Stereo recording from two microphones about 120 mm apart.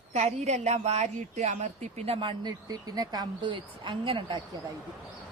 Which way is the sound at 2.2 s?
40° right (ahead or behind).